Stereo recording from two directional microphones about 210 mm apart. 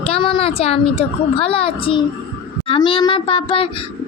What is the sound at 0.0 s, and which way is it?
A child's voice, 25° left (ahead or behind).